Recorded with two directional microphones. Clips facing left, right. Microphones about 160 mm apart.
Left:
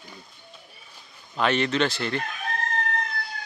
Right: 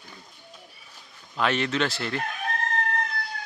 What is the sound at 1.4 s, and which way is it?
Speech, centre (ahead or behind).